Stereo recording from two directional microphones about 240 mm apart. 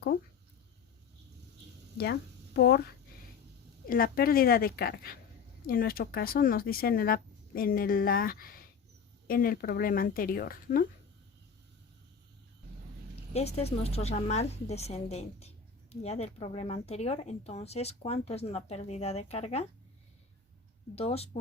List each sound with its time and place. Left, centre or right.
2.0 s a woman's voice: left
3.8 s speech: left
13.3 s a woman's voice: left
20.9 s a woman's voice: left